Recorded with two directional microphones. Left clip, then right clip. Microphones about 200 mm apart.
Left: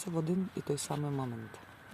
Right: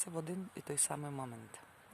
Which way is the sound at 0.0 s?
5° right (ahead or behind).